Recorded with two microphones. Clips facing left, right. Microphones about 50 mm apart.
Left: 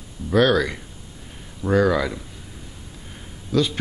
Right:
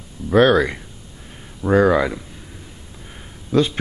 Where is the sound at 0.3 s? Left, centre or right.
Right.